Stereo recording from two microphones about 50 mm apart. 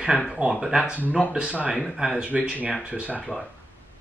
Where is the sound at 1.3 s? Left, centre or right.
Right.